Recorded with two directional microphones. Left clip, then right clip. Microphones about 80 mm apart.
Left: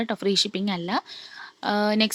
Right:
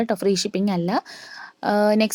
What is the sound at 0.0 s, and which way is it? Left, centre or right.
A woman's voice, right.